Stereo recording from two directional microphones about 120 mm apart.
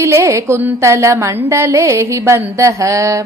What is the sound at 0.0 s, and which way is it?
A woman's voice, 25° right (ahead or behind).